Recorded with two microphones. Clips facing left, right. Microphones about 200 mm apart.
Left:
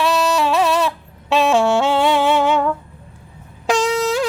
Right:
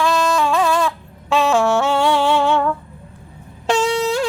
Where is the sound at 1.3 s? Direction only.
20° left (ahead or behind).